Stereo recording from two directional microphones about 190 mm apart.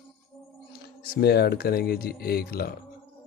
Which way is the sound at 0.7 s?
55° left (ahead or behind).